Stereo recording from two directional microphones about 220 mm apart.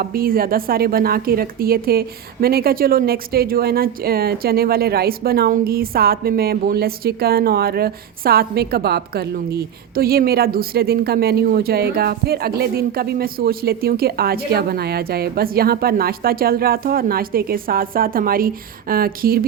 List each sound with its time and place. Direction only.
0.0 s a woman's voice: 40° right (ahead or behind)